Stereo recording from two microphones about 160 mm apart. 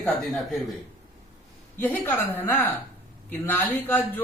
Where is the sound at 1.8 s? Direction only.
10° left (ahead or behind).